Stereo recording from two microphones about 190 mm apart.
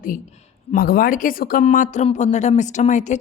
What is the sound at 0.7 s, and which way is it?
Speech, 50° left (ahead or behind).